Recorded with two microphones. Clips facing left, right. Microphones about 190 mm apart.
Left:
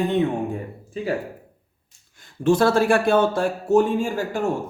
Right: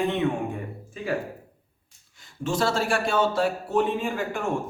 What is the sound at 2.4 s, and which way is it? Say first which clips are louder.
Speech: left 8 dB; 55° left (ahead or behind).